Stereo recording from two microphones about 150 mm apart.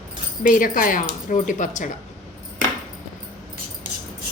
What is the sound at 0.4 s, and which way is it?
Speech, 65° left (ahead or behind).